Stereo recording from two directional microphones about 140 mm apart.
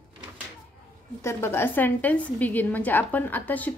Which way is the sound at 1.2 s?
15° left (ahead or behind).